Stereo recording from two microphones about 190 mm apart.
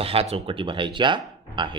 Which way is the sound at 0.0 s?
30° right (ahead or behind).